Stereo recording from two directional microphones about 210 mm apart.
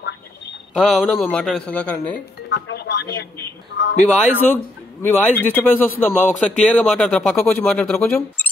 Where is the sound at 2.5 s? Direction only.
50° left (ahead or behind).